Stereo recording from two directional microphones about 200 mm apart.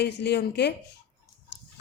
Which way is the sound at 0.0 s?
55° left (ahead or behind).